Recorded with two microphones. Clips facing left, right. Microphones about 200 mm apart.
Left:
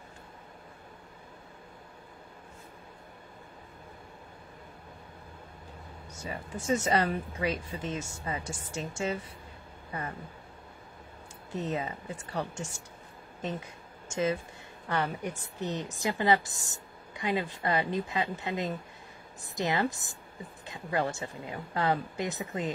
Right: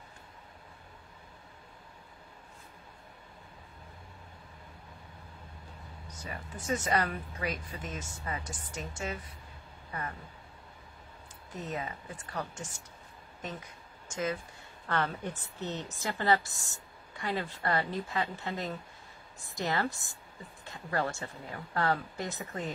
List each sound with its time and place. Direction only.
6.0 s speech: 25° left (ahead or behind)
11.5 s speech: 25° left (ahead or behind)
14.0 s speech: 25° left (ahead or behind)
14.9 s speech: 15° left (ahead or behind)